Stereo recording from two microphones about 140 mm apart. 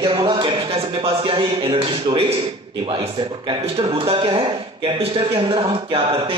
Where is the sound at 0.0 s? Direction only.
35° right (ahead or behind).